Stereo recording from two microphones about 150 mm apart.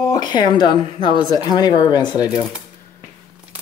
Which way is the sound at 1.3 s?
30° left (ahead or behind).